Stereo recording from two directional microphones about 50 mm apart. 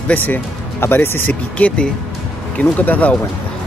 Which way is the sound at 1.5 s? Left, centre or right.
Left.